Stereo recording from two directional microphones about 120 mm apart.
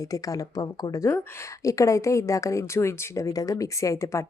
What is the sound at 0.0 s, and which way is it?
A woman's voice, 30° left (ahead or behind).